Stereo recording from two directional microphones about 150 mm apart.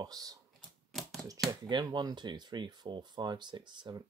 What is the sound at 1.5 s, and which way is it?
Speech, 25° right (ahead or behind).